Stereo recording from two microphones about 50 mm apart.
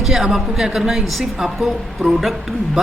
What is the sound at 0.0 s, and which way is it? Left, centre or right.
A woman's voice, centre.